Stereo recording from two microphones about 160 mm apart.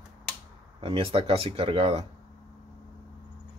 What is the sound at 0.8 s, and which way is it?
Speech, 35° right (ahead or behind).